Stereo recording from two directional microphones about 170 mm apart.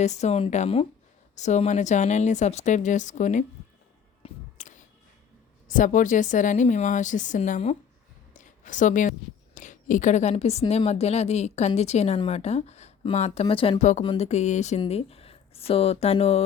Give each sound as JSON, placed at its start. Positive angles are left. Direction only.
{"t": 0.0, "sound": "a woman's voice", "side_deg": 40}
{"t": 4.2, "sound": "music", "side_deg": 45}
{"t": 5.6, "sound": "a woman's voice", "side_deg": 50}
{"t": 8.3, "sound": "a sound", "side_deg": 45}
{"t": 9.6, "sound": "a woman's voice", "side_deg": 50}